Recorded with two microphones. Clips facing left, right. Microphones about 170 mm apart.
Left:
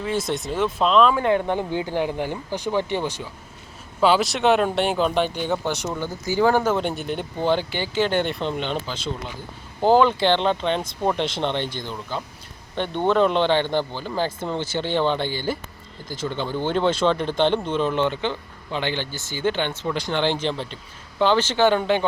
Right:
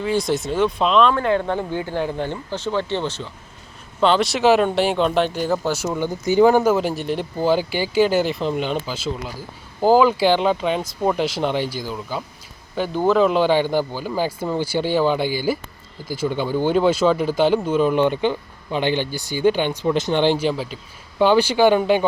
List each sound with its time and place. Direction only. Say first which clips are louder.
0.0 s speech: right 4 dB; centre (ahead or behind)
1.2 s speech: right 1 dB; 15° left (ahead or behind); by 6.0 s 5° right (ahead or behind)
6.0 s speech: right 7 dB; 15° right (ahead or behind)